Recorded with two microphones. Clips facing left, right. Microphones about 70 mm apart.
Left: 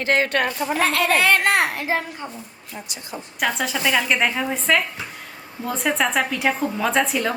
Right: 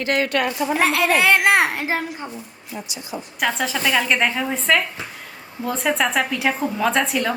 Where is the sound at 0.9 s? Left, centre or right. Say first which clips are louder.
Even; centre.